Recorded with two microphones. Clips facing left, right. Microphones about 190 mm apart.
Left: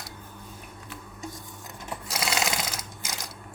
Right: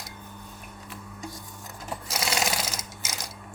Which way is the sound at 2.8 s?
Centre (ahead or behind).